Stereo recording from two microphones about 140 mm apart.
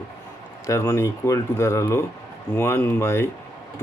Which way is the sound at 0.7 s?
20° left (ahead or behind).